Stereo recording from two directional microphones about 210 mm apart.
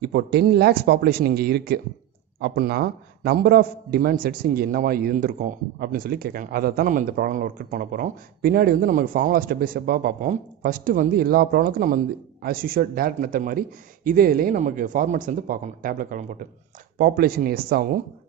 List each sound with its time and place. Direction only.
0.0 s a man's voice: 50° right (ahead or behind)